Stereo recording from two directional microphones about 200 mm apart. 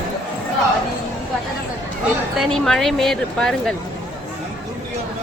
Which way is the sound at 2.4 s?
Centre (ahead or behind).